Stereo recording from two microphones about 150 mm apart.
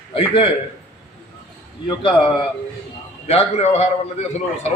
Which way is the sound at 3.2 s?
45° left (ahead or behind).